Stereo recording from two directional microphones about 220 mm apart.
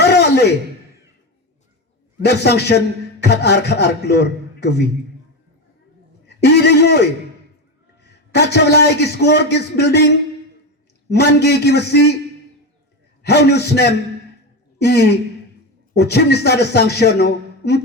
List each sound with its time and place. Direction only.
0.0 s a sound: 50° left (ahead or behind)
2.2 s a man's voice: 50° left (ahead or behind)
6.2 s a man's voice: 50° left (ahead or behind)
13.2 s a man's voice: 50° left (ahead or behind)